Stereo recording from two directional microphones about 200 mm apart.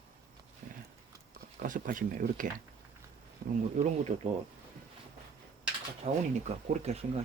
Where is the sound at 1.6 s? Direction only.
40° right (ahead or behind).